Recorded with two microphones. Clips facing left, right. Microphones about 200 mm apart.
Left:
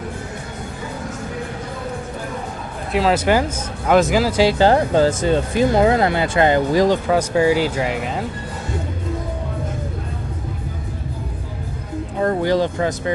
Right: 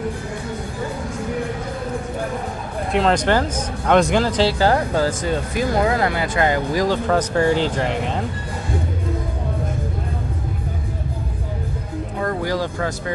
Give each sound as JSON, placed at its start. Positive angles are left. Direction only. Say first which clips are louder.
{"t": 2.9, "sound": "speech", "louder": "left 1 dB", "side_deg": 5}
{"t": 4.6, "sound": "speech", "louder": "left 4 dB", "side_deg": 25}
{"t": 7.1, "sound": "speech", "louder": "left 2 dB", "side_deg": 10}
{"t": 12.2, "sound": "speech", "louder": "left 5 dB", "side_deg": 25}